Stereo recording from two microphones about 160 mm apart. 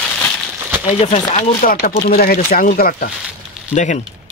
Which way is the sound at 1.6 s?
60° left (ahead or behind).